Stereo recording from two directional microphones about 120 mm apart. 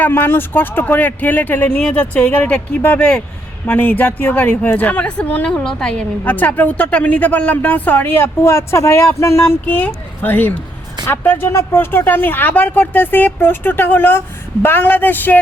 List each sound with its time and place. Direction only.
0.0 s speech: 20° left (ahead or behind)